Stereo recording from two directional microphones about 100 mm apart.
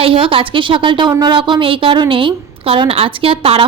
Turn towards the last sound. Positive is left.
turn(degrees=-70)  # may be behind; listen again after turning